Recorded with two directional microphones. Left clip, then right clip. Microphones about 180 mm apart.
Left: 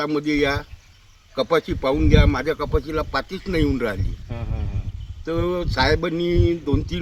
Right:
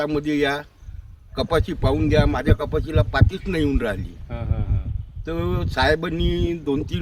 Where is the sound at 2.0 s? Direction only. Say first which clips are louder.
Right 2 dB; 40° right (ahead or behind).